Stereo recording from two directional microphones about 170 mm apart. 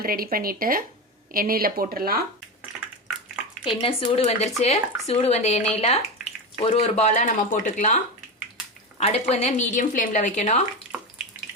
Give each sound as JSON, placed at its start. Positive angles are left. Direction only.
{"t": 0.0, "sound": "speech", "side_deg": -60}
{"t": 3.7, "sound": "a woman's voice", "side_deg": 30}